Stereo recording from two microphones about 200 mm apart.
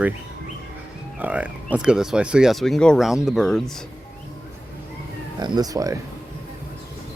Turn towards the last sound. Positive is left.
turn(degrees=-15)  # may be behind; listen again after turning